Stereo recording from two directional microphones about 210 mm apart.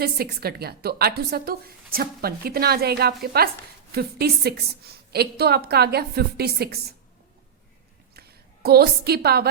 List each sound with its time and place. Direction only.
0.0 s a woman's voice: 50° right (ahead or behind)
8.1 s a woman's voice: 50° right (ahead or behind)